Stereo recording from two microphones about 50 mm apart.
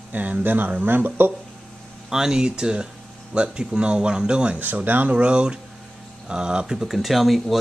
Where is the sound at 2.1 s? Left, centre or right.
Centre.